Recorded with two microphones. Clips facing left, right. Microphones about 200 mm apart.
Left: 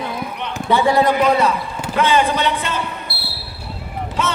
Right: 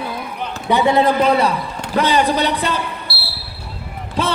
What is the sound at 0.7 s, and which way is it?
A man's voice, 25° right (ahead or behind).